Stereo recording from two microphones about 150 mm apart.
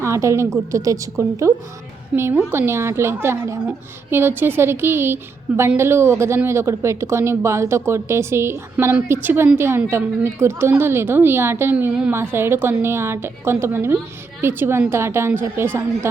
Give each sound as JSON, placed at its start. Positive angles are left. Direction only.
{"t": 0.0, "sound": "a woman's voice", "side_deg": -20}